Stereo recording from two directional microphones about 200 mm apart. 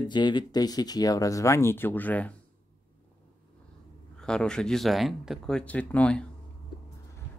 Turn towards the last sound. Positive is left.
turn(degrees=5)  # may be behind; listen again after turning